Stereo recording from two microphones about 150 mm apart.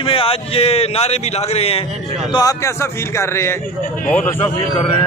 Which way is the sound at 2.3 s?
20° left (ahead or behind).